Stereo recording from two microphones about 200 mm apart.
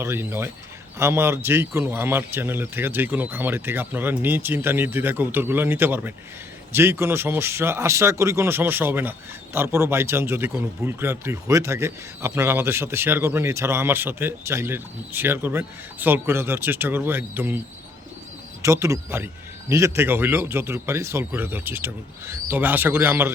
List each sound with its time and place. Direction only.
0.0 s speech: 10° right (ahead or behind)
18.6 s speech: 15° right (ahead or behind)